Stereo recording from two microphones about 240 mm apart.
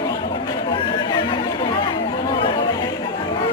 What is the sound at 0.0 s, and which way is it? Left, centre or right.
Chatter, left.